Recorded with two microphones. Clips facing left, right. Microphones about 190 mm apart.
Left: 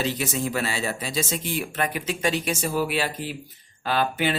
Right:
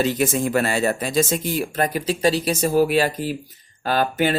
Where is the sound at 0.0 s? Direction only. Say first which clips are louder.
Right 6 dB; 50° right (ahead or behind).